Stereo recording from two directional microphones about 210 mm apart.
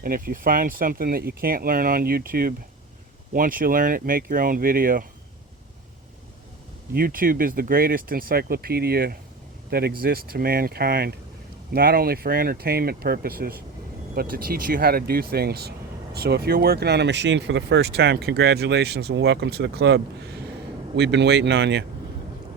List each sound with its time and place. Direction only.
0.0 s speech: 45° right (ahead or behind)
6.9 s speech: 45° right (ahead or behind)